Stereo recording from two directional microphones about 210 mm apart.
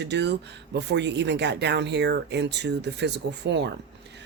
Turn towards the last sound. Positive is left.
turn(degrees=-55)  # may be behind; listen again after turning